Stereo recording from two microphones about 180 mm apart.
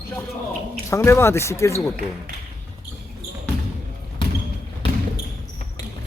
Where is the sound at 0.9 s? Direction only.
15° left (ahead or behind).